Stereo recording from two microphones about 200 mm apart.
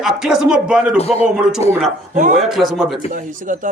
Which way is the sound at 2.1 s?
40° right (ahead or behind).